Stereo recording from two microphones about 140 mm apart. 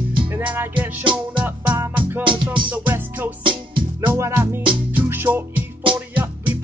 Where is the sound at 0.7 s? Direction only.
35° right (ahead or behind).